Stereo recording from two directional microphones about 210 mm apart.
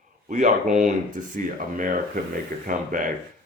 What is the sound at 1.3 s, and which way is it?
Speech, 40° right (ahead or behind).